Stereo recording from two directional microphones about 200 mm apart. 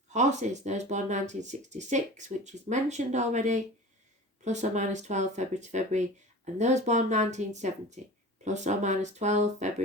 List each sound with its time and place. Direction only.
0.1 s speech: 35° right (ahead or behind)